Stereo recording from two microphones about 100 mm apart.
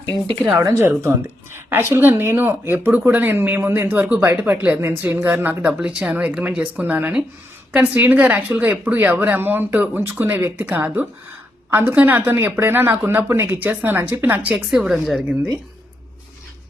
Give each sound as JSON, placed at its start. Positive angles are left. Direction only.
{"t": 0.6, "sound": "a woman's voice", "side_deg": -25}
{"t": 14.5, "sound": "a woman's voice", "side_deg": -5}